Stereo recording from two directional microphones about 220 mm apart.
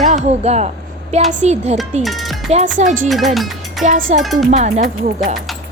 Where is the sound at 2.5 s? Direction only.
30° right (ahead or behind).